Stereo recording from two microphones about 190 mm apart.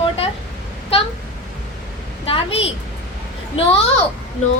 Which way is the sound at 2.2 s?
30° left (ahead or behind).